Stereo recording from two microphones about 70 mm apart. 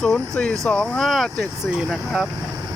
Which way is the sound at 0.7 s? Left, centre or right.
Centre.